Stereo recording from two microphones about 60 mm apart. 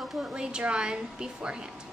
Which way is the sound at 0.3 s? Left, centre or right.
Centre.